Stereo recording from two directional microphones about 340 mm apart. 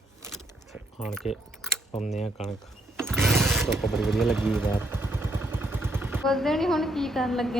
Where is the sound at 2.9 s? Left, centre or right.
Centre.